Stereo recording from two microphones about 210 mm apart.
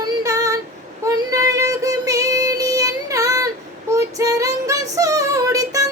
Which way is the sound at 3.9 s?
15° right (ahead or behind).